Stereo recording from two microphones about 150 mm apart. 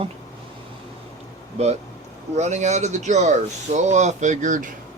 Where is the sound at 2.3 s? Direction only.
50° right (ahead or behind).